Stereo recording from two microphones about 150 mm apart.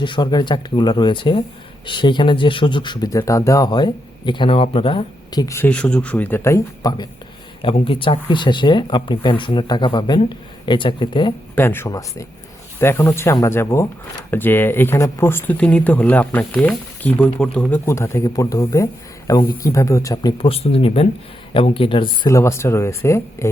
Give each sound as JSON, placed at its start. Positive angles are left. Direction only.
{"t": 0.0, "sound": "speech", "side_deg": 30}
{"t": 11.5, "sound": "speech", "side_deg": 15}
{"t": 17.8, "sound": "speech", "side_deg": 20}
{"t": 20.4, "sound": "speech", "side_deg": 40}